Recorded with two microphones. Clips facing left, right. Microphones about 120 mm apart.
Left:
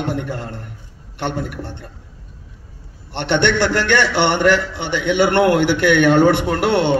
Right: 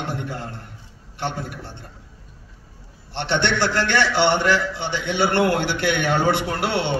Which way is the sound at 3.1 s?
60° left (ahead or behind).